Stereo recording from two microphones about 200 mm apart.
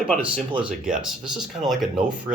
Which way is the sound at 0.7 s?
5° right (ahead or behind).